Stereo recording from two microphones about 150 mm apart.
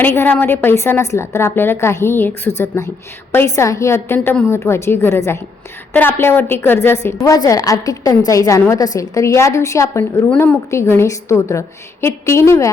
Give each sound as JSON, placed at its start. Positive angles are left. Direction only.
{"t": 0.0, "sound": "a woman's voice", "side_deg": 15}